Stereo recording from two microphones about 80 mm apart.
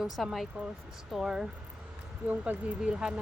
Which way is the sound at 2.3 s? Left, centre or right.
Centre.